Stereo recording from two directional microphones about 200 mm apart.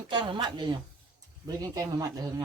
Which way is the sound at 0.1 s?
25° right (ahead or behind).